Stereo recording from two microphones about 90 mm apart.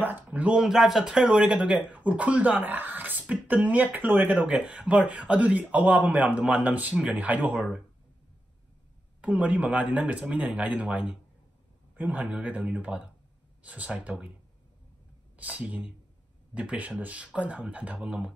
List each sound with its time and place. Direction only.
0.0 s speech: 20° right (ahead or behind)
9.2 s speech: 15° right (ahead or behind)
15.3 s speech: 15° right (ahead or behind)